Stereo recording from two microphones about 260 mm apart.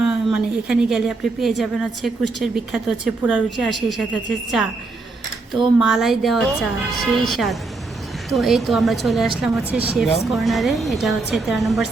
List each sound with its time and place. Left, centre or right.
0.0 s a woman's voice: centre
5.8 s a woman's voice: centre